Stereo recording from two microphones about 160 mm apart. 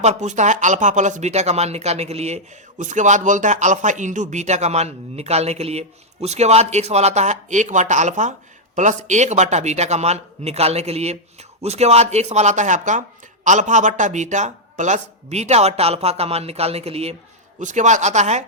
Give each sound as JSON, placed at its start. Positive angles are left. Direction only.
{"t": 0.0, "sound": "speech", "side_deg": -45}